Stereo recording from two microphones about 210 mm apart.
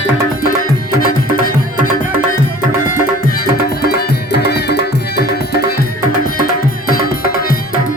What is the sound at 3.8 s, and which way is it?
Music, 45° left (ahead or behind).